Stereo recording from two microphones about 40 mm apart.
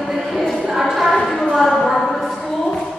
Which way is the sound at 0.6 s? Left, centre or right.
Centre.